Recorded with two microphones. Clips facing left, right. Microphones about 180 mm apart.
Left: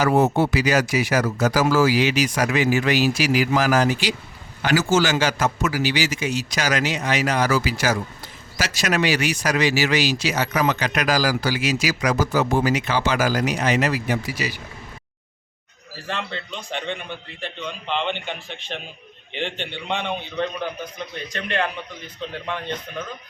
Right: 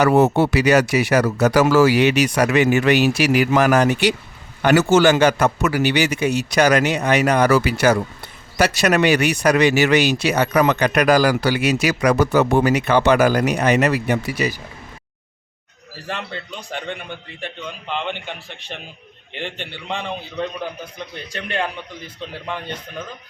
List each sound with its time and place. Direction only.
0.0 s speech: 70° right (ahead or behind)
16.0 s a man's voice: 10° right (ahead or behind)